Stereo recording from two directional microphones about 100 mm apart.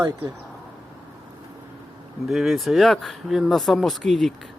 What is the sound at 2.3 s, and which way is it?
Speech, centre (ahead or behind).